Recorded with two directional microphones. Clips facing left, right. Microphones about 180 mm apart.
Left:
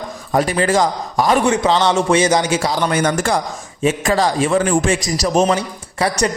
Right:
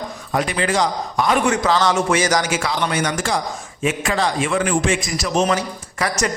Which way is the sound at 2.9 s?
55° left (ahead or behind).